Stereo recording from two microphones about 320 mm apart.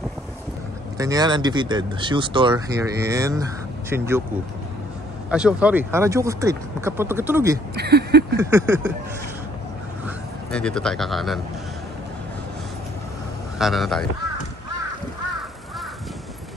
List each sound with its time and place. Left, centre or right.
0.9 s speech: centre
5.3 s speech: centre
7.7 s speech: right
8.4 s speech: centre
10.0 s speech: centre
13.6 s speech: centre